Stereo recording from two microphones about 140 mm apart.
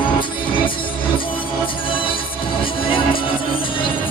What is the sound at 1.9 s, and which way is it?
Music, 40° left (ahead or behind).